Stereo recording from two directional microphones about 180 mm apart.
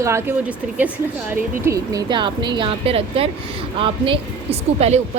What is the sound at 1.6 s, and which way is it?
A woman's voice, 20° right (ahead or behind).